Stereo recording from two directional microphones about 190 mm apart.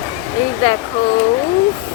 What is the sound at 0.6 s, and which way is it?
Speech, 25° left (ahead or behind).